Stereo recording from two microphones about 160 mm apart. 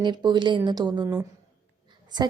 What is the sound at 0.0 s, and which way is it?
Speech, 25° right (ahead or behind).